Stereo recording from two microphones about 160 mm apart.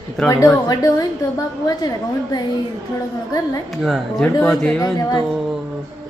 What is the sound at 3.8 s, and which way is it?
Speech, centre (ahead or behind).